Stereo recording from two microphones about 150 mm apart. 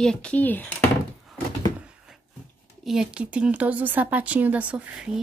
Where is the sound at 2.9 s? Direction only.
5° right (ahead or behind).